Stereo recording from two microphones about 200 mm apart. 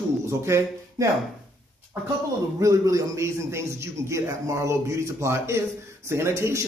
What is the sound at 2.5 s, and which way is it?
Speech, 15° right (ahead or behind).